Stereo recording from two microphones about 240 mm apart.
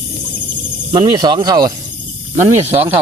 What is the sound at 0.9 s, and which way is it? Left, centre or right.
Speech, centre.